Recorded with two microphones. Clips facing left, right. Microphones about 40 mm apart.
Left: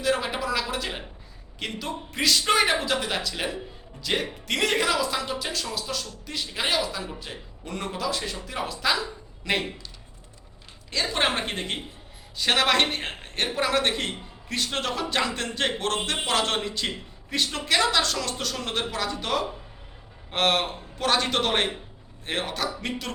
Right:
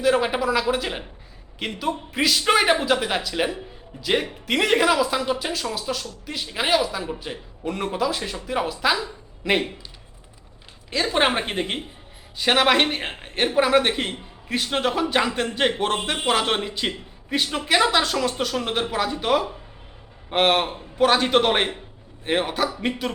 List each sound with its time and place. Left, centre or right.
0.0 s a man's voice: centre
11.0 s a woman's voice: right